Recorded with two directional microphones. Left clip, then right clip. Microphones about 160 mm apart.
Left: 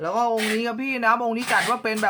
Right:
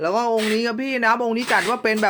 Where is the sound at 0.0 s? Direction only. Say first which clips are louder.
Right 2 dB; 40° right (ahead or behind).